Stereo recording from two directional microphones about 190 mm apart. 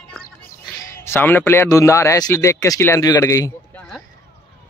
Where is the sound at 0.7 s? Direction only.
10° left (ahead or behind).